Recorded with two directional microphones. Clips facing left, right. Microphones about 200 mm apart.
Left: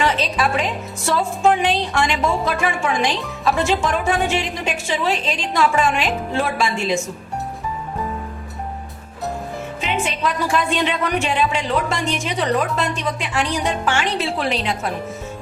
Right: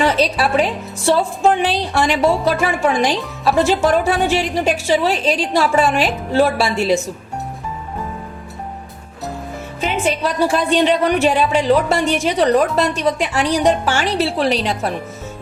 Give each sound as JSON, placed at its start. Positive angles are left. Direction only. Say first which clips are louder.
{"t": 0.0, "sound": "a woman's voice", "louder": "right 4 dB", "side_deg": -40}
{"t": 1.6, "sound": "speech", "louder": "right 2 dB", "side_deg": -35}
{"t": 9.8, "sound": "speech", "louder": "right 4 dB", "side_deg": -40}